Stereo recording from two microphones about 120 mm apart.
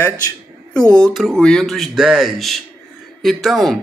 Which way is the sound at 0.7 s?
5° left (ahead or behind).